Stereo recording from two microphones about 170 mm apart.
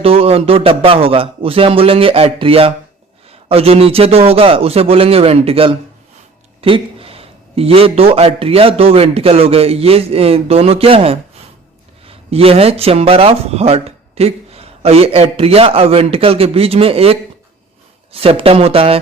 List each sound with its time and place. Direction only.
0.0 s speech: 35° right (ahead or behind)